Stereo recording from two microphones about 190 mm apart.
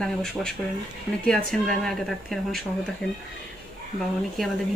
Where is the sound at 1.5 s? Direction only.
Centre (ahead or behind).